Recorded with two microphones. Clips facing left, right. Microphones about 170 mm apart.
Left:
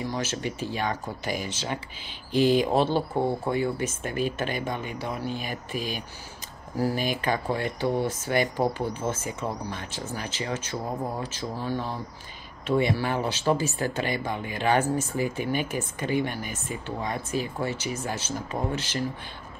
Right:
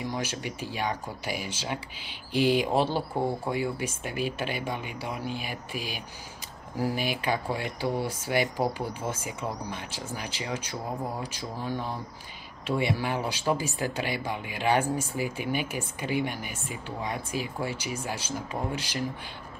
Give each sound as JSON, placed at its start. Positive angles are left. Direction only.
{"t": 0.0, "sound": "speech", "side_deg": -15}